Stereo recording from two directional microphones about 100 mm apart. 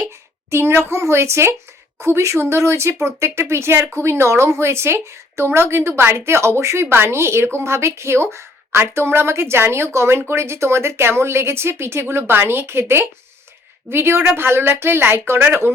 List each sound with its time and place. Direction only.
0.1 s a woman's voice: 25° right (ahead or behind)